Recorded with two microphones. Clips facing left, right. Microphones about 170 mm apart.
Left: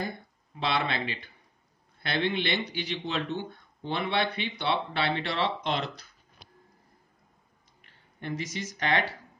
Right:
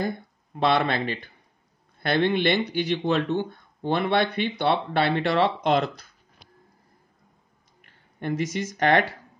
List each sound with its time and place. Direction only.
0.6 s speech: 50° right (ahead or behind)
7.8 s speech: 50° right (ahead or behind)